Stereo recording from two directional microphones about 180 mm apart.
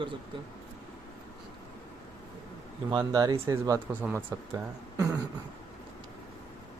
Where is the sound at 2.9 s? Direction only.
20° right (ahead or behind).